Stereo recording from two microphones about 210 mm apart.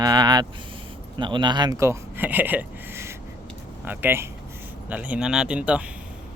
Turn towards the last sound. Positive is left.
turn(degrees=-5)  # may be behind; listen again after turning